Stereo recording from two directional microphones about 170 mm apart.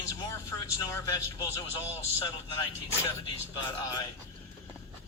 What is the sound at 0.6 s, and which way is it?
Speech, 20° left (ahead or behind).